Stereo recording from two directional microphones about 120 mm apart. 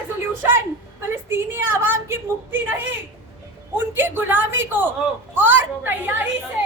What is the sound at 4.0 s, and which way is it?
A woman's voice, 15° right (ahead or behind).